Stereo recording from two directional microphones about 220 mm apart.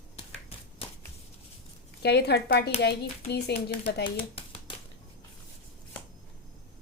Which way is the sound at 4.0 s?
25° left (ahead or behind).